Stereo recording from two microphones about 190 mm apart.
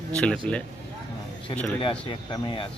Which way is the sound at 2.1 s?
25° left (ahead or behind).